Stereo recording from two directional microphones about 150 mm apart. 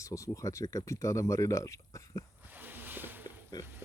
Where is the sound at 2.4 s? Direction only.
10° right (ahead or behind).